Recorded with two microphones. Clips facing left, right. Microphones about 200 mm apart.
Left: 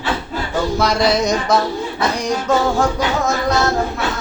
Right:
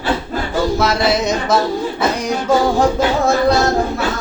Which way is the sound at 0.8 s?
5° right (ahead or behind).